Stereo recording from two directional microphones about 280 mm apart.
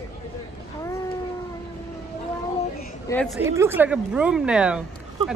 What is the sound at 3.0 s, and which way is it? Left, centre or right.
Speech, centre.